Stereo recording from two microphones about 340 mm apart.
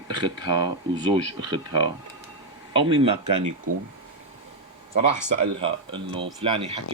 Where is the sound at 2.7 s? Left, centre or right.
Centre.